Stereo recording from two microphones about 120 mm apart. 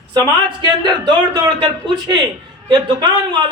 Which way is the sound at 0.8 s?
40° right (ahead or behind).